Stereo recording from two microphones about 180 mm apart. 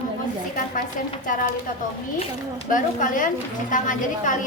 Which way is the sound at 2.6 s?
45° left (ahead or behind).